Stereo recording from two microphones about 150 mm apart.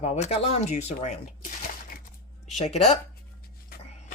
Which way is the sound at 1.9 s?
75° left (ahead or behind).